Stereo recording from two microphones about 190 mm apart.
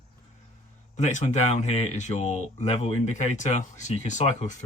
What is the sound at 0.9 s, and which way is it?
Speech, 40° left (ahead or behind).